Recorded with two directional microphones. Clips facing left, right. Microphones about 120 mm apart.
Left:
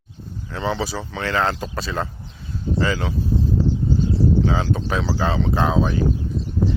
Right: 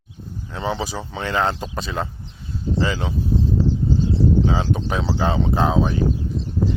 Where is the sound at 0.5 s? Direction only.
20° right (ahead or behind).